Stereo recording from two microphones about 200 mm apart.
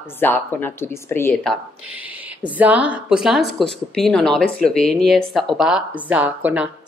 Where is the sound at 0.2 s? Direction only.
10° left (ahead or behind).